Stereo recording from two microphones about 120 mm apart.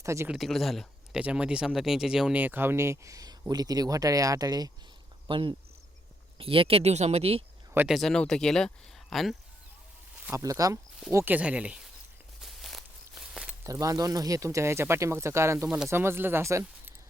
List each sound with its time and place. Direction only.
0.0 s speech: 25° right (ahead or behind)
0.3 s speech: centre (ahead or behind); by 4.7 s 35° right (ahead or behind)
5.3 s speech: 45° right (ahead or behind)
7.9 s speech: centre (ahead or behind)
10.3 s speech: 30° right (ahead or behind); by 11.8 s 10° right (ahead or behind)
12.4 s a sound: centre (ahead or behind)
13.7 s speech: 30° right (ahead or behind)